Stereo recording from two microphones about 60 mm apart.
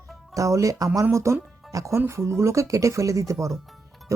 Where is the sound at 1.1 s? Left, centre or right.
Right.